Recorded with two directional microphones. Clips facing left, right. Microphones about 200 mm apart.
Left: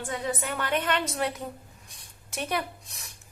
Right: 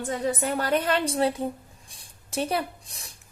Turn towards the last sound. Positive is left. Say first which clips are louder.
# right 3 dB
turn(degrees=-30)  # may be behind; listen again after turning